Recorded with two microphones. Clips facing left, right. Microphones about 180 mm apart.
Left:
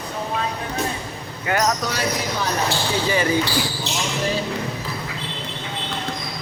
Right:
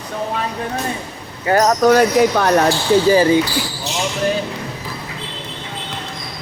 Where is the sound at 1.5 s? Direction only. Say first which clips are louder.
Right 9 dB; 40° right (ahead or behind); by 2.5 s 55° right (ahead or behind).